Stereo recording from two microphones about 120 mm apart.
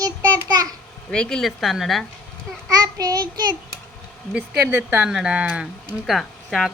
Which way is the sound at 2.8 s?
30° right (ahead or behind).